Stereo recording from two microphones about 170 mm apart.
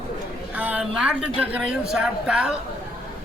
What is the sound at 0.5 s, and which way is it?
A man's voice, 10° right (ahead or behind).